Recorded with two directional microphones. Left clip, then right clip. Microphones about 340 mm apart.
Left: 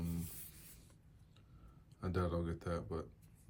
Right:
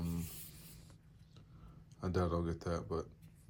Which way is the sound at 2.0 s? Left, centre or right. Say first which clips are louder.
Right 3 dB; centre.